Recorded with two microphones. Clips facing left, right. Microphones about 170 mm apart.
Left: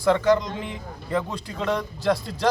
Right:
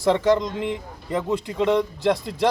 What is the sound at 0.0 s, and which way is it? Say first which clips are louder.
Speech: right 1 dB; 20° right (ahead or behind).